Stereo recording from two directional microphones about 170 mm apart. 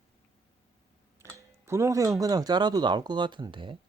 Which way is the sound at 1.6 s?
15° right (ahead or behind).